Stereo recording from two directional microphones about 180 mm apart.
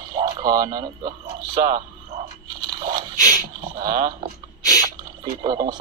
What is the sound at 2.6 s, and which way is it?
Scrape, 25° right (ahead or behind).